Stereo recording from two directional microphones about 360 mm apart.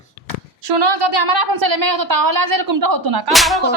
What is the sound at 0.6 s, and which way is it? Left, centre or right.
A woman's voice, right.